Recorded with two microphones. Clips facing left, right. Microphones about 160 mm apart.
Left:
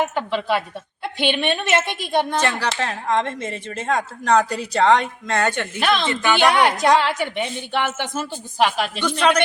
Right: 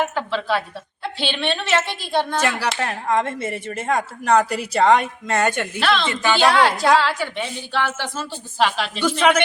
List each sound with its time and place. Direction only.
0.1 s a woman's voice: 15° left (ahead or behind)
2.4 s speech: 10° right (ahead or behind)
5.8 s a woman's voice: 15° left (ahead or behind)
9.0 s speech: 10° right (ahead or behind)